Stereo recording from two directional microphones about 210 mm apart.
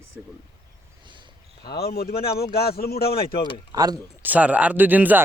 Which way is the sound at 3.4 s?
25° left (ahead or behind).